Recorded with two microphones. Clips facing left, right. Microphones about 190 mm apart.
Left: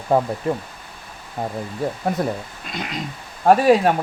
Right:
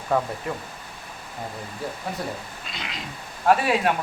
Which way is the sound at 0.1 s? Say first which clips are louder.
Left 5 dB; 30° left (ahead or behind).